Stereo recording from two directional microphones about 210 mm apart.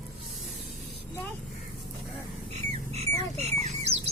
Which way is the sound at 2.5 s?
30° right (ahead or behind).